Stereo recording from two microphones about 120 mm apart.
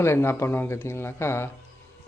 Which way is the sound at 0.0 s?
20° left (ahead or behind).